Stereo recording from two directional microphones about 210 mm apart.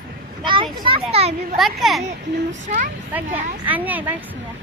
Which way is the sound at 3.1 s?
10° right (ahead or behind).